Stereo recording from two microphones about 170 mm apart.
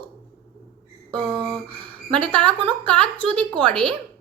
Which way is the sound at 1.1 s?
30° right (ahead or behind).